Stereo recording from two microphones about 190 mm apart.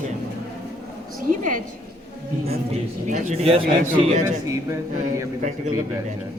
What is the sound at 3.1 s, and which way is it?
Speech, 40° right (ahead or behind).